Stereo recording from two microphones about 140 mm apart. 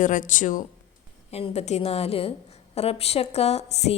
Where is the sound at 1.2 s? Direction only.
50° left (ahead or behind).